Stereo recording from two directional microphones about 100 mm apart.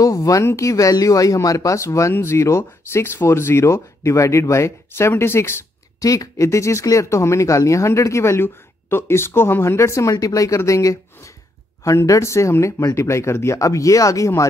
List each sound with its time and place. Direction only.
0.0 s speech: 35° left (ahead or behind)
5.9 s speech: 35° left (ahead or behind)